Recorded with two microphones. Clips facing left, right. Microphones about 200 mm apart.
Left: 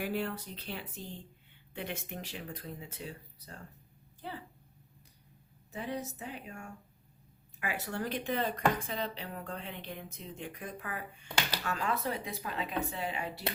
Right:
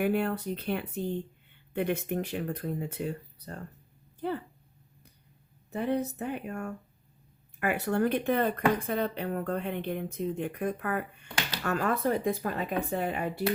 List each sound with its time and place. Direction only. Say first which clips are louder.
0.0 s speech: right 7 dB; 55° right (ahead or behind)
5.7 s speech: right 9 dB; 60° right (ahead or behind)